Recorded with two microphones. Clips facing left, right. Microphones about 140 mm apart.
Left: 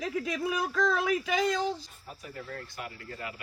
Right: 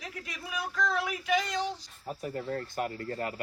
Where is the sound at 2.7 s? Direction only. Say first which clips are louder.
Right 8 dB; 45° right (ahead or behind).